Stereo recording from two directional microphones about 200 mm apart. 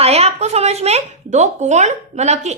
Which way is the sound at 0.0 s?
30° right (ahead or behind).